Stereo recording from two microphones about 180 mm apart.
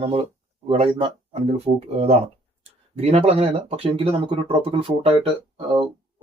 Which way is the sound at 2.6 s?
35° right (ahead or behind).